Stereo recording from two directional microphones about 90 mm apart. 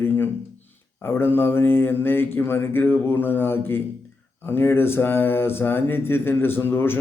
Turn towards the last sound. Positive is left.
turn(degrees=25)  # may be behind; listen again after turning